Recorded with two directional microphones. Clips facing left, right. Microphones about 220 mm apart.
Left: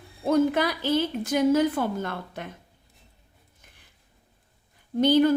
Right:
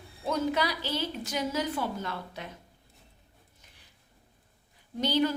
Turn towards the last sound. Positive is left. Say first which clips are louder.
# left 8 dB
turn(degrees=50)  # may be behind; listen again after turning